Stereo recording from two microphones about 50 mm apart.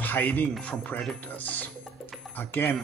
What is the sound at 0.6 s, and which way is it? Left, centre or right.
Speech, left.